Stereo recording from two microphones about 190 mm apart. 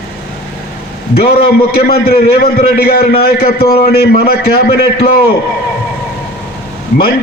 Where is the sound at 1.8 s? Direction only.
55° left (ahead or behind).